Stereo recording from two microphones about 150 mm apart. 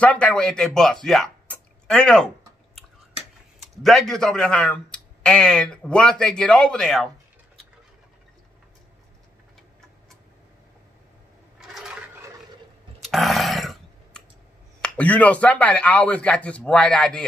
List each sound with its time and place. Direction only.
0.0 s speech: 10° left (ahead or behind)
1.0 s a sound: 5° left (ahead or behind)
3.8 s speech: centre (ahead or behind)
11.7 s a sound: 5° right (ahead or behind)
13.0 s dog: centre (ahead or behind)
14.8 s speech: 10° left (ahead or behind)